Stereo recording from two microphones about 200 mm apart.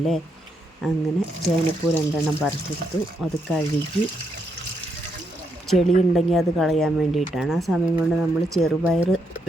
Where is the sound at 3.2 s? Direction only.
Centre (ahead or behind).